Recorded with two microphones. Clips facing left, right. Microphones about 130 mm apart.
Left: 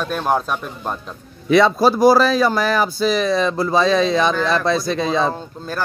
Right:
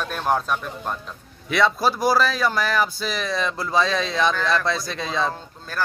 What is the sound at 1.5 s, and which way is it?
Speech, 30° left (ahead or behind).